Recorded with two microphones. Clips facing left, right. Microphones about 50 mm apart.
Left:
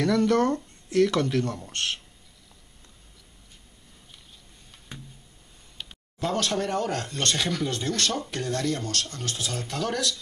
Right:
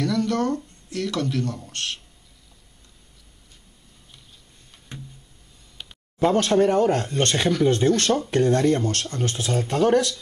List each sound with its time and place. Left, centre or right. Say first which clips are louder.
0.0 s speech: left 1 dB; centre
6.2 s speech: right 8 dB; right